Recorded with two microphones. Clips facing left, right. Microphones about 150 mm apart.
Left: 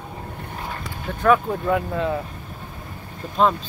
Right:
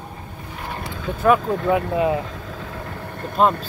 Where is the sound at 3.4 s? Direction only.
5° right (ahead or behind).